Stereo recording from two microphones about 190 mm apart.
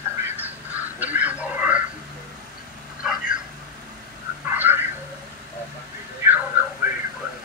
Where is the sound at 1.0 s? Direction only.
10° right (ahead or behind).